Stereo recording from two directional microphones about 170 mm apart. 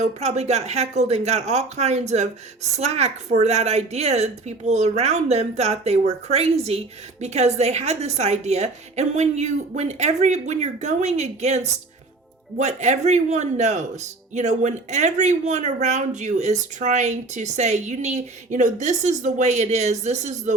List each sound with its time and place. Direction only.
0.0 s a woman's voice: 40° right (ahead or behind)